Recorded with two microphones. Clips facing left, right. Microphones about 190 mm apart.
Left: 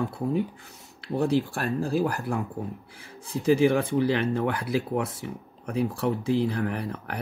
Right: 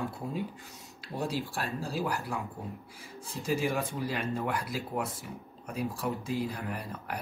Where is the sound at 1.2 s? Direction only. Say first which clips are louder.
Left 9 dB; 50° left (ahead or behind).